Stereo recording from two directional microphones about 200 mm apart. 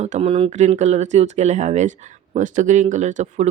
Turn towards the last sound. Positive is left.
turn(degrees=-35)  # may be behind; listen again after turning